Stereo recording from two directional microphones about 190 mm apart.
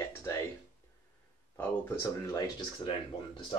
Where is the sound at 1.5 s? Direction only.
15° left (ahead or behind).